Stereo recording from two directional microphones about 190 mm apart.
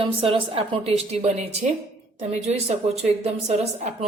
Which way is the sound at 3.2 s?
35° right (ahead or behind).